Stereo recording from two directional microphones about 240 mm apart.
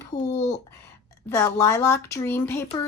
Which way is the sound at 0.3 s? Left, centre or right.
Left.